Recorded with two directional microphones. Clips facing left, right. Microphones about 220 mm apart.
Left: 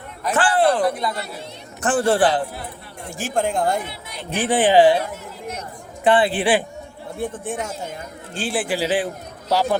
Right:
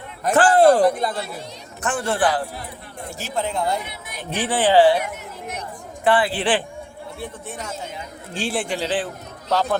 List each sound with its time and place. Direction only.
0.2 s a man's voice: 45° right (ahead or behind)
1.8 s a man's voice: 35° left (ahead or behind)
3.2 s speech: 50° left (ahead or behind)
4.4 s speech: 20° left (ahead or behind)
6.1 s speech: 20° left (ahead or behind)
6.4 s a man's voice: 10° left (ahead or behind)
7.2 s speech: 50° left (ahead or behind)
8.3 s a man's voice: centre (ahead or behind)